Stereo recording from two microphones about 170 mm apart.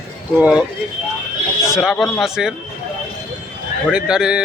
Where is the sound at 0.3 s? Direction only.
5° right (ahead or behind).